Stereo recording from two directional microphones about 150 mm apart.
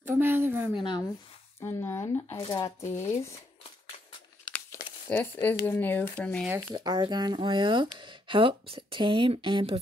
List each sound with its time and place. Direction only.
0.0 s a sound: 15° right (ahead or behind)
0.7 s speech: 30° left (ahead or behind)
1.6 s a sound: 15° left (ahead or behind)
3.0 s speech: 20° left (ahead or behind)
4.7 s crumpling: 25° left (ahead or behind)
5.1 s speech: 15° left (ahead or behind)
6.7 s speech: 30° right (ahead or behind)